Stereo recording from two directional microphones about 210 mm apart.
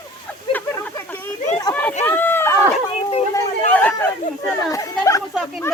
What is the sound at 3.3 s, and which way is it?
Chatter, 10° left (ahead or behind).